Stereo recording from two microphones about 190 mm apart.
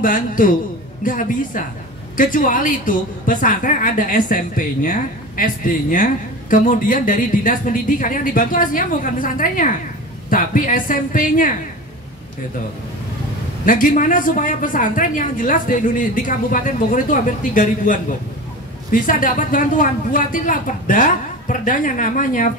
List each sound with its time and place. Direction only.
0.0 s a woman's voice: 45° left (ahead or behind)
13.7 s a woman's voice: 45° left (ahead or behind)